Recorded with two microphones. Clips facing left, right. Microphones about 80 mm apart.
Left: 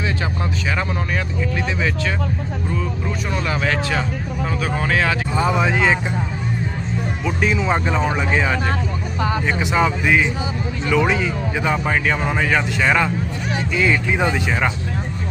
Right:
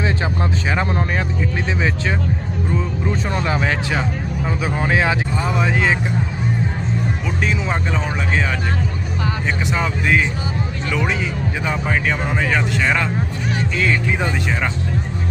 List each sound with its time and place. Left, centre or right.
3.4 s speech: right
5.4 s speech: centre
7.3 s speech: centre
9.6 s speech: centre